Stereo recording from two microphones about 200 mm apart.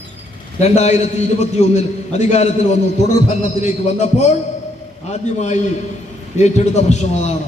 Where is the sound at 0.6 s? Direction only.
35° left (ahead or behind).